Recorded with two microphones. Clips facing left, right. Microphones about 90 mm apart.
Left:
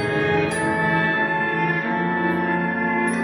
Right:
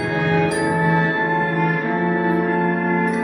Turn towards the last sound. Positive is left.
turn(degrees=-15)  # may be behind; listen again after turning